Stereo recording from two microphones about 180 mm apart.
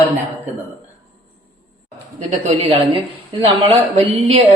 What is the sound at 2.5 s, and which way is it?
A woman's voice, 35° right (ahead or behind).